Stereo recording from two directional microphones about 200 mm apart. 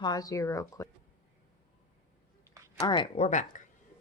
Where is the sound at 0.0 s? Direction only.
20° left (ahead or behind).